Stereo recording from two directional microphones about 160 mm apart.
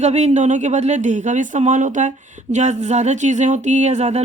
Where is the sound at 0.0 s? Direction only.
45° right (ahead or behind).